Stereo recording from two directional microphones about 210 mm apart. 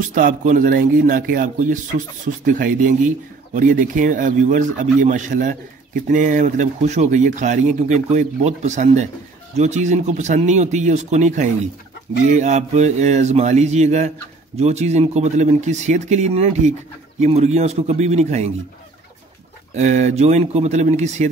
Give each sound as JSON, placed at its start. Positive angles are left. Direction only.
{"t": 0.1, "sound": "speech", "side_deg": -40}
{"t": 19.7, "sound": "speech", "side_deg": -35}